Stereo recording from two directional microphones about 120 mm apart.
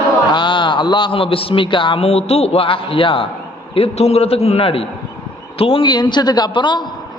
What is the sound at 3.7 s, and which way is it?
A man's voice, 60° left (ahead or behind).